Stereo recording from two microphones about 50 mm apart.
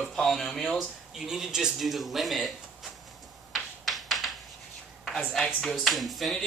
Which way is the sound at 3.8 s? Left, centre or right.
Centre.